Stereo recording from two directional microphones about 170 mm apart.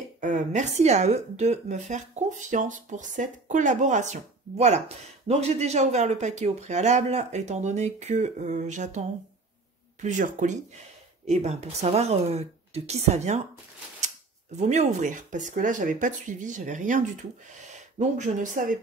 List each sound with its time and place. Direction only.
0.2 s speech: 45° right (ahead or behind)
14.6 s speech: 45° right (ahead or behind)